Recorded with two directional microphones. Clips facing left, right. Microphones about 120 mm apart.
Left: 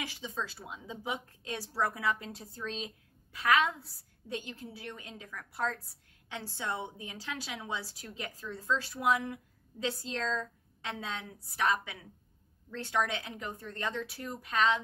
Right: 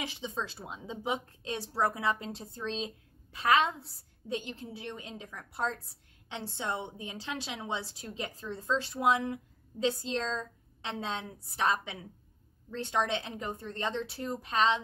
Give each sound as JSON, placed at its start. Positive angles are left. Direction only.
{"t": 0.0, "sound": "a woman's voice", "side_deg": -20}